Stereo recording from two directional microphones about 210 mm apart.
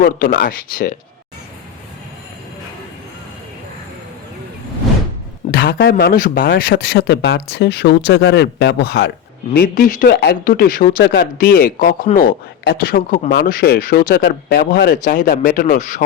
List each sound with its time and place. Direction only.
0.0 s speech: 40° left (ahead or behind)
5.5 s speech: 45° left (ahead or behind)
14.9 s speech: 35° left (ahead or behind)